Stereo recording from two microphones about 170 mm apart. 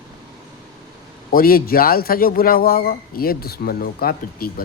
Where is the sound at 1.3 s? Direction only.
60° left (ahead or behind).